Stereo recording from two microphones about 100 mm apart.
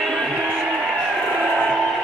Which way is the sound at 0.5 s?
Centre (ahead or behind).